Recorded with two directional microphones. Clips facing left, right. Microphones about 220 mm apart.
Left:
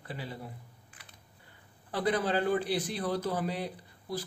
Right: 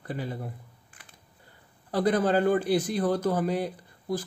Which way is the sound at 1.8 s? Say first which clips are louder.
Right 6 dB; 45° right (ahead or behind).